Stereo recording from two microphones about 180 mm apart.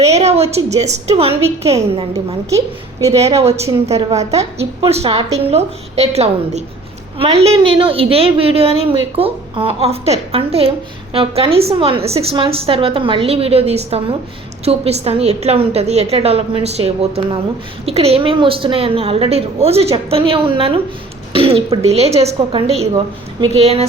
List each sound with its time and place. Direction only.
0.0 s a woman's voice: 35° right (ahead or behind)
2.5 s a woman's voice: 15° right (ahead or behind)
3.1 s a woman's voice: 35° right (ahead or behind)